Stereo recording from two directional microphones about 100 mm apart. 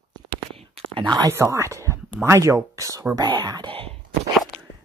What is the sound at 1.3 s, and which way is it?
Speech, 30° right (ahead or behind).